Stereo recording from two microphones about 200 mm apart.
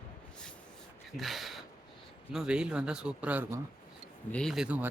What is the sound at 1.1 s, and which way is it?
Speech, centre (ahead or behind).